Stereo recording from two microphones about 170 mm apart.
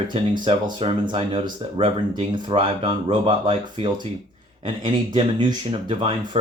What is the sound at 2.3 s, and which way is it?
Speech, 25° right (ahead or behind).